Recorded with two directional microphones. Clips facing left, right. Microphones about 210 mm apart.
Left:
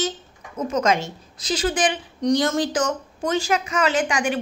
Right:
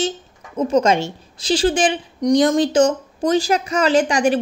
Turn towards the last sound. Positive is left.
turn(degrees=-35)  # may be behind; listen again after turning